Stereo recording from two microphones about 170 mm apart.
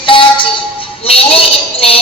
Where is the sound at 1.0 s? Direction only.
35° left (ahead or behind).